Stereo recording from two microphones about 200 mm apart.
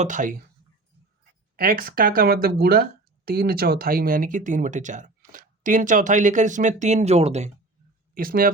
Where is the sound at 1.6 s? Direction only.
50° right (ahead or behind).